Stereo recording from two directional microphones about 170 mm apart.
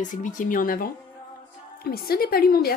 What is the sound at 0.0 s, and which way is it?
Speech, 50° left (ahead or behind).